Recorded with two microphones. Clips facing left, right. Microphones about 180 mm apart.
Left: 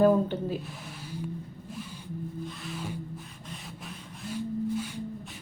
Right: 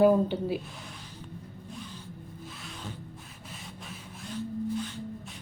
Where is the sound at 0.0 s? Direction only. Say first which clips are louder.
Even; 10° right (ahead or behind).